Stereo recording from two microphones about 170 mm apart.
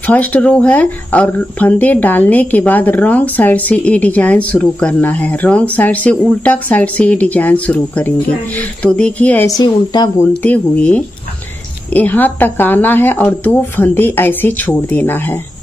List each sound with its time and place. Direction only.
0.0 s speech: 10° left (ahead or behind)
9.5 s speech: 25° left (ahead or behind)
10.4 s speech: 10° left (ahead or behind)